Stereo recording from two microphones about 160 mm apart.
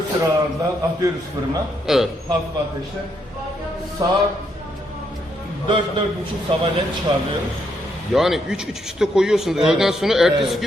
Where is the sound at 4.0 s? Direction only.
20° right (ahead or behind).